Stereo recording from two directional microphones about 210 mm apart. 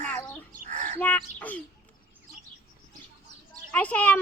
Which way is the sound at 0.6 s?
35° right (ahead or behind).